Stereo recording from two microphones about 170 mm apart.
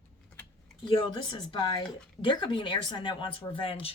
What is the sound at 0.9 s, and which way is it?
Speech, 30° left (ahead or behind).